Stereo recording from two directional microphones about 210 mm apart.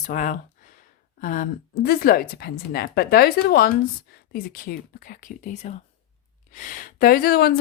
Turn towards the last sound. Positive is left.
turn(degrees=45)  # may be behind; listen again after turning